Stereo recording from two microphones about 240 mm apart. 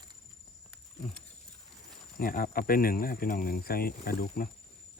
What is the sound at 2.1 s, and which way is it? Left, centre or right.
Speech, left.